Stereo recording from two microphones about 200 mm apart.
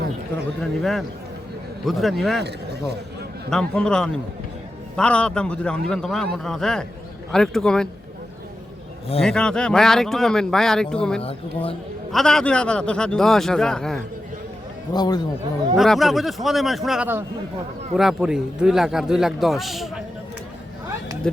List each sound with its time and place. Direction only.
0.6 s speech: centre (ahead or behind)
3.5 s speech: 5° left (ahead or behind)
9.2 s speech: 5° left (ahead or behind)
11.2 s speech: 30° left (ahead or behind)
12.1 s speech: 5° left (ahead or behind)
14.9 s speech: 20° left (ahead or behind)
15.7 s speech: centre (ahead or behind)